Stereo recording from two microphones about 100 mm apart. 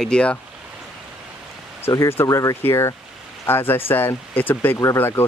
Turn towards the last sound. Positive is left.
turn(degrees=25)  # may be behind; listen again after turning